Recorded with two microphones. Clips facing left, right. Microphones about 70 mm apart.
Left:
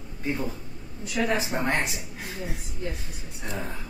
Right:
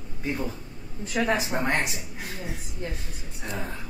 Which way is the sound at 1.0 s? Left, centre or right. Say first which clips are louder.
Right 1 dB; right.